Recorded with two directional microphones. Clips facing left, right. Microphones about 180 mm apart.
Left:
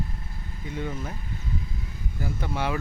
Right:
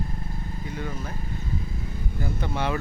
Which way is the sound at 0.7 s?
20° left (ahead or behind).